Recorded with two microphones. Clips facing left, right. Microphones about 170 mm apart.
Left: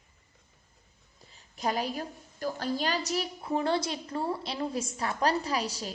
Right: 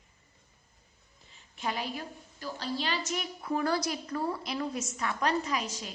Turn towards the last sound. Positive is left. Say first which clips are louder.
# left 2 dB
turn(degrees=35)  # may be behind; listen again after turning